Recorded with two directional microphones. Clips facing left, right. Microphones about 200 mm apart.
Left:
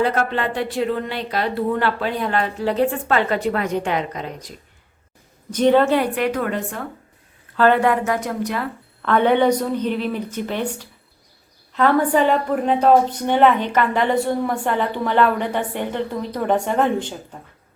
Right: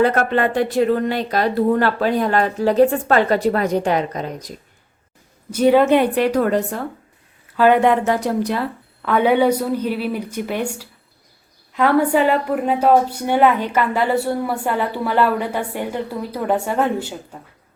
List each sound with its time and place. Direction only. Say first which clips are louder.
0.0 s speech: right 4 dB; 50° right (ahead or behind)
5.5 s a woman's voice: right 2 dB; 10° right (ahead or behind)
6.1 s a woman's voice: right 5 dB; 35° right (ahead or behind)
7.5 s a woman's voice: right 2 dB; 10° right (ahead or behind)
7.8 s speech: right 3 dB; 25° right (ahead or behind)
9.0 s a woman's voice: right 1 dB; 10° right (ahead or behind)